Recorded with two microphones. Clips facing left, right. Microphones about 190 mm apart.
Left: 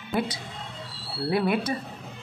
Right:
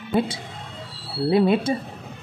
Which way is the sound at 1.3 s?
25° right (ahead or behind).